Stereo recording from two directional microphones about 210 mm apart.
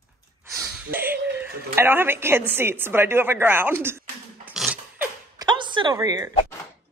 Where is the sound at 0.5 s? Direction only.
5° right (ahead or behind).